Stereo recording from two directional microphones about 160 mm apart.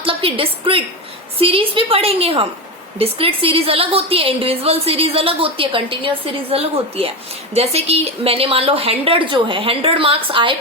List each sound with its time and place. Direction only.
0.0 s a woman's voice: 35° right (ahead or behind)